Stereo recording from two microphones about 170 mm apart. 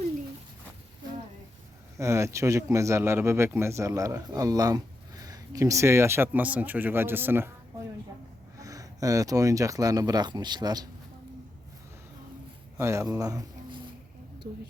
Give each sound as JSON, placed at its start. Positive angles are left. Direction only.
{"t": 2.0, "sound": "speech", "side_deg": -15}
{"t": 8.5, "sound": "speech", "side_deg": -20}
{"t": 12.7, "sound": "speech", "side_deg": -15}